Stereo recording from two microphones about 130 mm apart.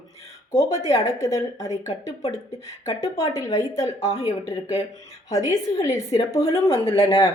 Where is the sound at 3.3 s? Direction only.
25° left (ahead or behind).